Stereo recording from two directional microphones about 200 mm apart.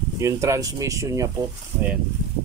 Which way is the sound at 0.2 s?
15° right (ahead or behind).